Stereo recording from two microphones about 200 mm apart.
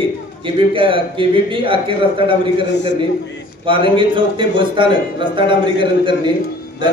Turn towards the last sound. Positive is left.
turn(degrees=-25)  # may be behind; listen again after turning